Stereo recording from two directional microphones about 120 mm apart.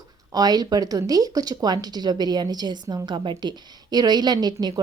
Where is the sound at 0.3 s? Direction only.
35° right (ahead or behind).